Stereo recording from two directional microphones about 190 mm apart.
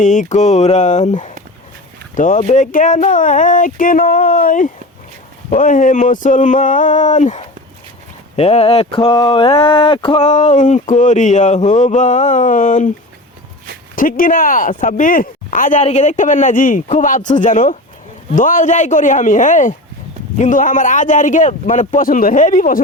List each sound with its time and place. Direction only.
0.0 s speech: 40° left (ahead or behind)
13.9 s speech: 45° left (ahead or behind)